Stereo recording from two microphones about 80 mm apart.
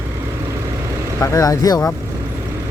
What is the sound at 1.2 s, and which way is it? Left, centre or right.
Speech, left.